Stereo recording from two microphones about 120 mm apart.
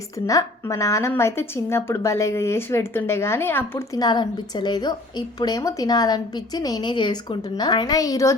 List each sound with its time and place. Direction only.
0.3 s a woman's voice: 25° left (ahead or behind)
3.9 s a woman's voice: 35° left (ahead or behind)